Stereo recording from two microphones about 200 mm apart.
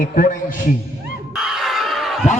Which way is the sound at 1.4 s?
Centre (ahead or behind).